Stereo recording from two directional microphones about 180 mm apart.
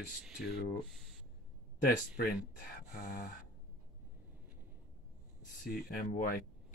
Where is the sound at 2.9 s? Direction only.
55° left (ahead or behind).